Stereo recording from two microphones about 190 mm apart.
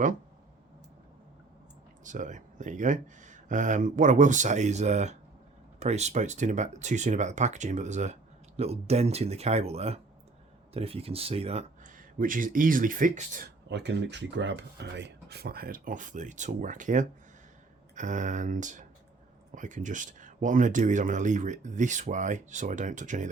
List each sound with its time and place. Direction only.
2.0 s speech: 40° right (ahead or behind)
13.7 s speech: 65° right (ahead or behind); by 23.3 s 40° right (ahead or behind)